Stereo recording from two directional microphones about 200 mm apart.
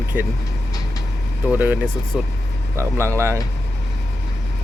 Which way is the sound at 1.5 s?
5° right (ahead or behind).